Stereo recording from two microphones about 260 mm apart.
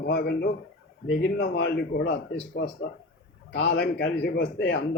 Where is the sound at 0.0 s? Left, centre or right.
Left.